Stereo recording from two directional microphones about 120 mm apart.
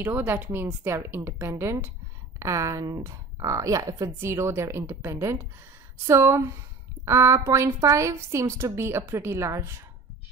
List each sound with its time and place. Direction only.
0.0 s speech: 20° right (ahead or behind)